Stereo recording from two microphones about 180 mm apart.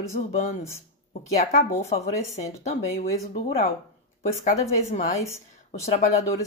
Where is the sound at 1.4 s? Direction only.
40° left (ahead or behind).